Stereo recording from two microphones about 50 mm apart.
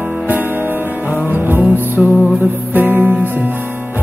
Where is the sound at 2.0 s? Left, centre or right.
Centre.